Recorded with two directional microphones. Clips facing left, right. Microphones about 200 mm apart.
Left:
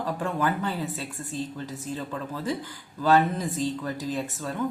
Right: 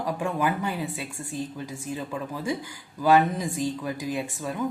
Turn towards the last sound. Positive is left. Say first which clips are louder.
# even
turn(degrees=-10)  # may be behind; listen again after turning